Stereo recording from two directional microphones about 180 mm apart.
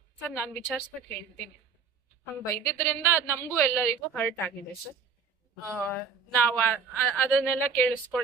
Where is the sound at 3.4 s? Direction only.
15° left (ahead or behind).